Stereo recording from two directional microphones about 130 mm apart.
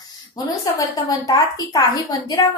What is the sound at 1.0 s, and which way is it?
A woman's voice, 30° left (ahead or behind).